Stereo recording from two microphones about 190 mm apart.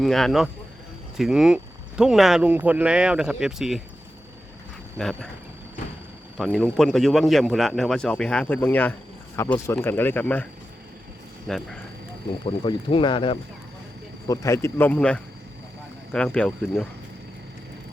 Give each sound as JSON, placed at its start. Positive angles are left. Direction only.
{"t": 0.0, "sound": "a man's voice", "side_deg": 0}
{"t": 4.9, "sound": "a man's voice", "side_deg": 5}
{"t": 6.3, "sound": "a man's voice", "side_deg": 5}
{"t": 11.4, "sound": "a man's voice", "side_deg": 5}
{"t": 12.5, "sound": "speech", "side_deg": 25}
{"t": 14.3, "sound": "a man's voice", "side_deg": 15}